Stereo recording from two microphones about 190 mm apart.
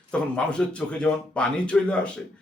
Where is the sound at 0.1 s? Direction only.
5° left (ahead or behind).